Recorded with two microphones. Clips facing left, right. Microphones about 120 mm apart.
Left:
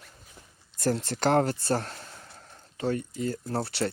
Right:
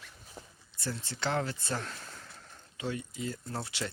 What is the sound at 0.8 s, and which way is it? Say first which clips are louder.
Speech: left 11 dB; 90° left.